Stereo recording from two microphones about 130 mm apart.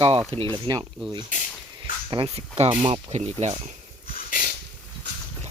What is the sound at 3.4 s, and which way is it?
Speech, 60° right (ahead or behind).